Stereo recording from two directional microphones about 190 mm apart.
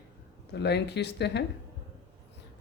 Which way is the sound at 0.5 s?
60° left (ahead or behind).